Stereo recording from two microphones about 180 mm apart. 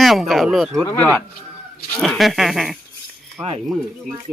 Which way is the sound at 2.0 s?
Centre (ahead or behind).